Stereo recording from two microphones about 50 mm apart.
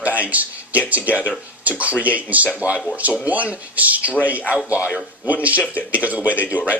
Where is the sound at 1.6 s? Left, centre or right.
Right.